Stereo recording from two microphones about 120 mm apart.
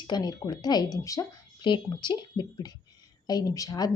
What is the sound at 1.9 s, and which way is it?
A woman's voice, 40° left (ahead or behind).